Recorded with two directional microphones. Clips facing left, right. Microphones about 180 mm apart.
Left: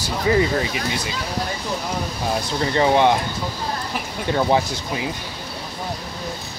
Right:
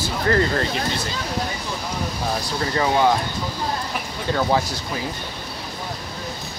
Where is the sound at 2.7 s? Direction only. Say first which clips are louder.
Left 3 dB; 25° left (ahead or behind).